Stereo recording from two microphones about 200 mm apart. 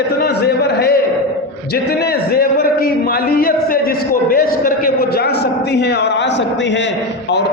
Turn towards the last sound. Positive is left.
turn(degrees=60)  # may be behind; listen again after turning